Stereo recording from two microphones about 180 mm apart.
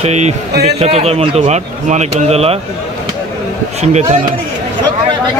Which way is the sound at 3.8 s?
40° right (ahead or behind).